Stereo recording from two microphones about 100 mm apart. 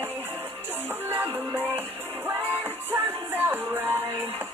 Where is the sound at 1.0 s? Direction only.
20° right (ahead or behind).